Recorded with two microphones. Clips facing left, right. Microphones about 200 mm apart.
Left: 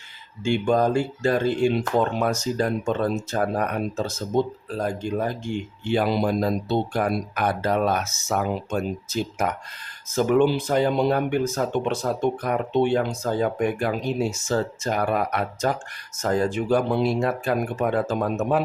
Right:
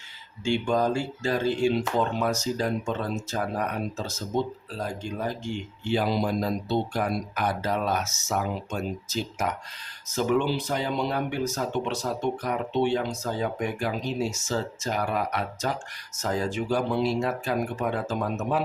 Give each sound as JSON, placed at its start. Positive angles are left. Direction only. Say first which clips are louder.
{"t": 0.4, "sound": "speech", "louder": "left 4 dB", "side_deg": 55}